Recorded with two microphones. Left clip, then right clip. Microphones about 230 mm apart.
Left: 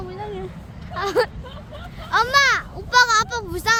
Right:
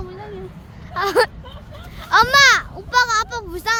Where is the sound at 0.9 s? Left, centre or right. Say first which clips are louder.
Right 4 dB; right.